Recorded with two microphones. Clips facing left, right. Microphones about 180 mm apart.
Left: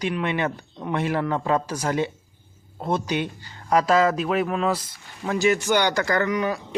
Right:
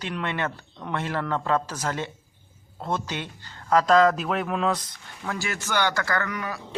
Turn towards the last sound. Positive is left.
turn(degrees=20)  # may be behind; listen again after turning